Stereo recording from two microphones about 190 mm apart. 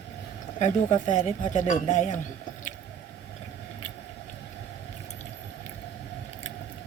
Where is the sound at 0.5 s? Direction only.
40° left (ahead or behind).